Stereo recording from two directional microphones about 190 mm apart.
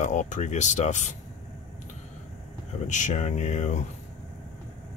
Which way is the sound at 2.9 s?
40° left (ahead or behind).